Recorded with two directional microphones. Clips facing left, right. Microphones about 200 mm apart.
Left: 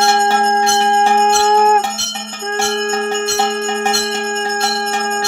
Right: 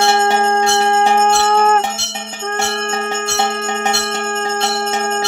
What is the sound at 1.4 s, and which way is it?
Music, 10° left (ahead or behind).